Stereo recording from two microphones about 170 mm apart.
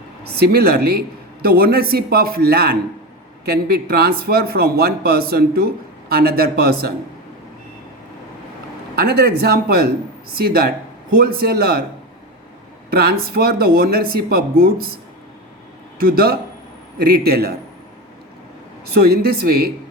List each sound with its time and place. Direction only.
0.3 s speech: 70° right (ahead or behind)
9.0 s speech: 65° right (ahead or behind)
12.9 s speech: 65° right (ahead or behind)
16.0 s speech: 65° right (ahead or behind)
18.9 s speech: 65° right (ahead or behind)